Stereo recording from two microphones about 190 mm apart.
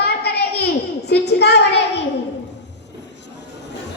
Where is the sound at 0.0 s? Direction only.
55° left (ahead or behind).